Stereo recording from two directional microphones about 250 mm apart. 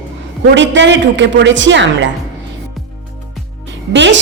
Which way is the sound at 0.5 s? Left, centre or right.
Right.